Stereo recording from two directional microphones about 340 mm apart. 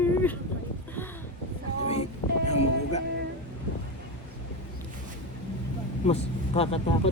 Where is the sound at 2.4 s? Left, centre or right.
Centre.